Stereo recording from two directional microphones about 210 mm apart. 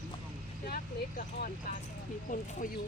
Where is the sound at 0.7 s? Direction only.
40° left (ahead or behind).